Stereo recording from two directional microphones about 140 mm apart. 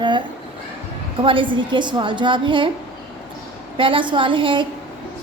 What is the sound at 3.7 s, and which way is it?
Speech, 40° right (ahead or behind).